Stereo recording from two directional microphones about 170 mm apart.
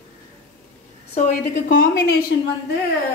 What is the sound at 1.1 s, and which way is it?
Speech, 45° left (ahead or behind).